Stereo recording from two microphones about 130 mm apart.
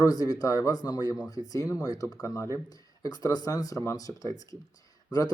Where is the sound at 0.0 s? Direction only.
30° left (ahead or behind).